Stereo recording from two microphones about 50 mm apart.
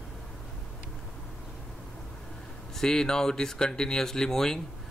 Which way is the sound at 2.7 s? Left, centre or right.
Centre.